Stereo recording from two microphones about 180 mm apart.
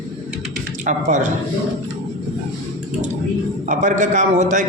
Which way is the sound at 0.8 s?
45° right (ahead or behind).